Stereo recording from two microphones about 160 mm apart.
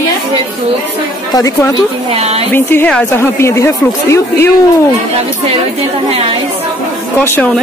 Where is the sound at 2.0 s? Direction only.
40° right (ahead or behind).